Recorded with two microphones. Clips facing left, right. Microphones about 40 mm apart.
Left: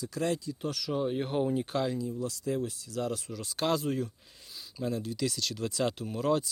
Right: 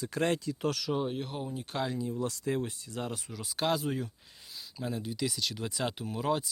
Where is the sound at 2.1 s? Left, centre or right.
Right.